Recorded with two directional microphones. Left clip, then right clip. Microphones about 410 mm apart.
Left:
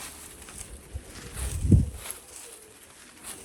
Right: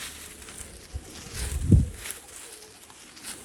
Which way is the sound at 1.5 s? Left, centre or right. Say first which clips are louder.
Even; centre.